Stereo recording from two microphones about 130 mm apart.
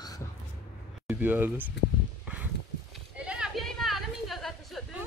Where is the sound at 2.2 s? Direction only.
10° right (ahead or behind).